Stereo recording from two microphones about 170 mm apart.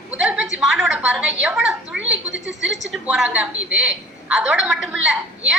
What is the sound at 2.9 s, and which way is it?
A woman's voice, centre (ahead or behind).